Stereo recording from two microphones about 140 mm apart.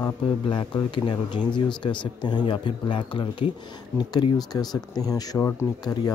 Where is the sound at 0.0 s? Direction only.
30° left (ahead or behind).